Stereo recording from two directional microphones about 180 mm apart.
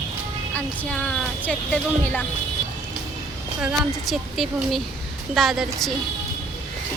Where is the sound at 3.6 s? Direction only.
5° right (ahead or behind).